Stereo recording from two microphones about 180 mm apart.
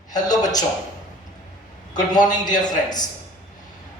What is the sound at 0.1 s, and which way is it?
Speech, 20° left (ahead or behind).